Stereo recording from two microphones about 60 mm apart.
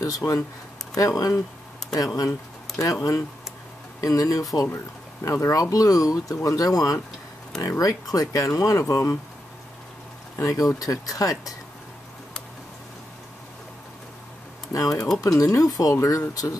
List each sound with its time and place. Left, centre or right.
0.0 s speech: left
2.8 s speech: left
5.2 s speech: left
10.4 s speech: left
14.7 s speech: left
16.0 s speech: left